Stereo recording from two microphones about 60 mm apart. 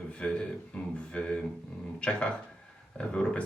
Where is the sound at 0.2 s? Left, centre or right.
Centre.